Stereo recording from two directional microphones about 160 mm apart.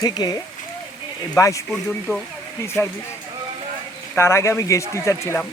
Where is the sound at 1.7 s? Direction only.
5° left (ahead or behind).